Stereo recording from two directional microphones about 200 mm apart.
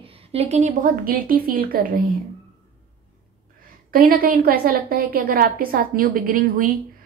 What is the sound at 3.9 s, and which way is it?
A woman's voice, 45° right (ahead or behind).